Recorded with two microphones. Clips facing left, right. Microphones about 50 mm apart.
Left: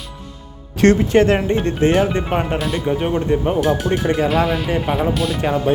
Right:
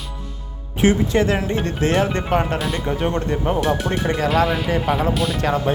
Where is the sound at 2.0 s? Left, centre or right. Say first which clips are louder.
Even; centre.